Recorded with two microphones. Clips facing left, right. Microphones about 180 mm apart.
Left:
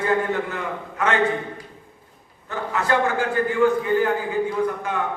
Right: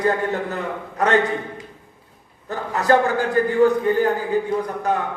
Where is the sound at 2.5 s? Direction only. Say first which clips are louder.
Right 4 dB; 40° right (ahead or behind).